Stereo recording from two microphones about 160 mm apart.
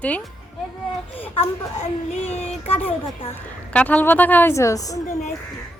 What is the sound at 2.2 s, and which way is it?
Child singing, 40° left (ahead or behind).